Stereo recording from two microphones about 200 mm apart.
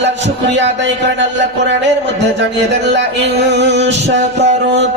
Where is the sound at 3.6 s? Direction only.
60° right (ahead or behind).